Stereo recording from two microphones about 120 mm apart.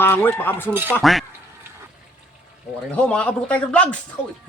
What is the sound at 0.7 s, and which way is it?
Speech, 15° right (ahead or behind).